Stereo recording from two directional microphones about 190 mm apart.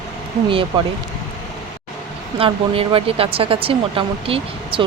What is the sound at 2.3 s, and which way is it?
Speech, 30° right (ahead or behind).